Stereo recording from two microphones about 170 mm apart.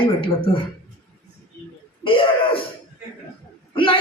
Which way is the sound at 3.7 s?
30° left (ahead or behind).